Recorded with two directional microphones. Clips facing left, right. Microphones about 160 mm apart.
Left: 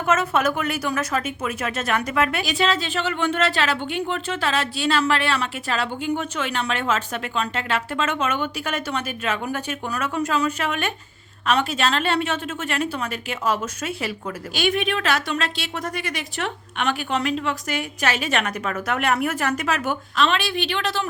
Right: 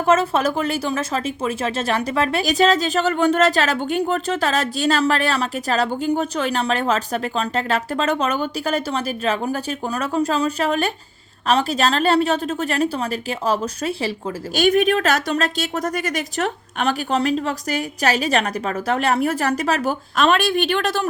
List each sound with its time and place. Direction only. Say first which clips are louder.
0.0 s a woman's voice: right 3 dB; 30° right (ahead or behind); by 21.1 s 50° right (ahead or behind)